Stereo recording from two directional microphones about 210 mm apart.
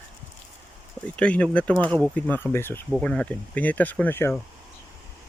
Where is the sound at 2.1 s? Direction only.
10° left (ahead or behind).